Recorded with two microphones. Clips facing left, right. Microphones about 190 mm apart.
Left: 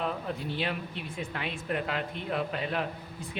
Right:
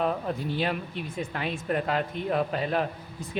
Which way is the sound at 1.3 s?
40° right (ahead or behind).